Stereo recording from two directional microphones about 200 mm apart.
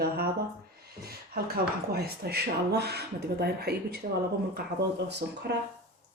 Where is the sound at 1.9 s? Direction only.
50° right (ahead or behind).